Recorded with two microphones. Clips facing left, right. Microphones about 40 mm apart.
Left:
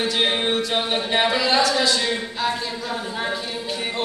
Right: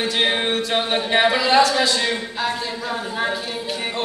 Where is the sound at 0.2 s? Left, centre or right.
Centre.